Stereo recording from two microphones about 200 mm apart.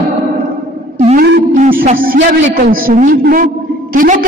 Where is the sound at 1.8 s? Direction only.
45° right (ahead or behind).